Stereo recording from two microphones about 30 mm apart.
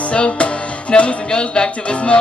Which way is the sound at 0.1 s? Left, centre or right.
Left.